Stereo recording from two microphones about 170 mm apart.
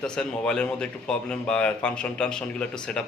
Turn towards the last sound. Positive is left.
turn(degrees=5)  # may be behind; listen again after turning